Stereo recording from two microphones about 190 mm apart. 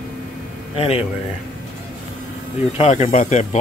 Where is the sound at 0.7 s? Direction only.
30° left (ahead or behind).